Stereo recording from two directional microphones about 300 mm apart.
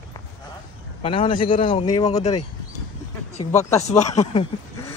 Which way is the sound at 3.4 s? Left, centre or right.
Left.